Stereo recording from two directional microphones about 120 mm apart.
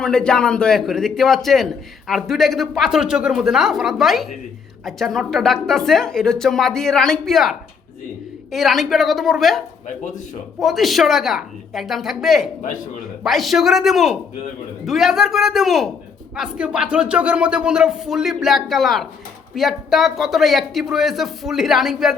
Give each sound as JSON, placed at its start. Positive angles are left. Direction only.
{"t": 0.0, "sound": "a man's voice", "side_deg": 5}
{"t": 9.8, "sound": "speech", "side_deg": 90}
{"t": 10.6, "sound": "a man's voice", "side_deg": 0}